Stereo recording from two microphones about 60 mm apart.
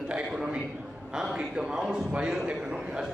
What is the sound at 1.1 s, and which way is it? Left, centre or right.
A man's voice, centre.